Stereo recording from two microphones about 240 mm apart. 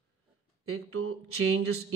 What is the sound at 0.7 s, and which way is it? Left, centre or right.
Speech, right.